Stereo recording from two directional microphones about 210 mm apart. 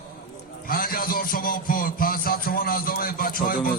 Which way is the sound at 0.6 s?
45° left (ahead or behind).